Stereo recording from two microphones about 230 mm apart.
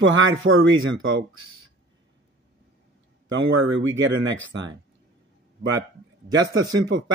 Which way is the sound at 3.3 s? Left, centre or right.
Right.